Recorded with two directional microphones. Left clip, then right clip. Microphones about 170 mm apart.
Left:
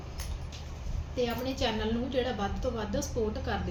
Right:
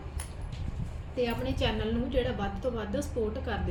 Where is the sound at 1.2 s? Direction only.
10° right (ahead or behind).